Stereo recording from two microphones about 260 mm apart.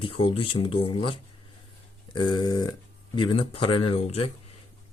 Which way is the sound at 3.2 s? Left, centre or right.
Centre.